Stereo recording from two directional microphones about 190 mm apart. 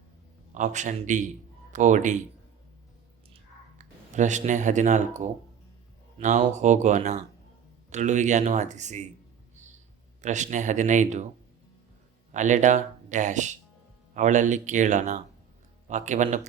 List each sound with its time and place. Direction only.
0.5 s speech: 40° right (ahead or behind)
3.3 s a sound: 40° right (ahead or behind)
6.1 s speech: 40° right (ahead or behind)
10.2 s speech: 40° right (ahead or behind)
12.3 s speech: 40° right (ahead or behind)